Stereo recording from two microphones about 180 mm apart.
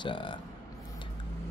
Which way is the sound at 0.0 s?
25° left (ahead or behind).